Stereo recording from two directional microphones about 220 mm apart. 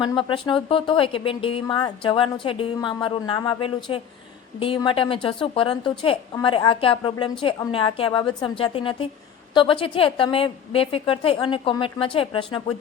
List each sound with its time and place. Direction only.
0.0 s speech: 20° left (ahead or behind)